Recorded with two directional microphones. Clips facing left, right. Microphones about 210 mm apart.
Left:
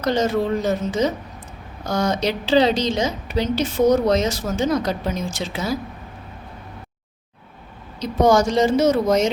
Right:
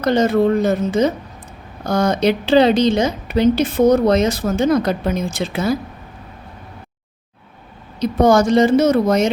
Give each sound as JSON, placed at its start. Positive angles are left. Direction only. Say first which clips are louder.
{"t": 0.0, "sound": "a woman's voice", "louder": "right 5 dB", "side_deg": -55}
{"t": 7.9, "sound": "a woman's voice", "louder": "right 3 dB", "side_deg": -55}